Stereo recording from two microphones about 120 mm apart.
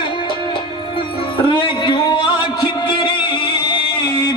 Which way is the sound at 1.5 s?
40° left (ahead or behind).